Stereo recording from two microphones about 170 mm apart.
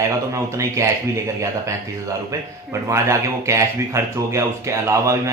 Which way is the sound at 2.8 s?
15° right (ahead or behind).